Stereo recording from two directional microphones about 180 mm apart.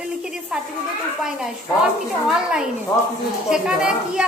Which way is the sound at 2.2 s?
5° right (ahead or behind).